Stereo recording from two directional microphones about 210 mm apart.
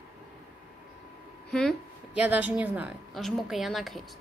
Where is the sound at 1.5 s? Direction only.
Centre (ahead or behind).